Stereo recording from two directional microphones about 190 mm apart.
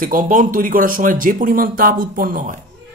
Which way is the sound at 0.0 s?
45° right (ahead or behind).